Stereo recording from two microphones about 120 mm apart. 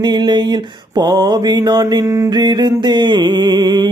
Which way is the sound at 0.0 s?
35° right (ahead or behind).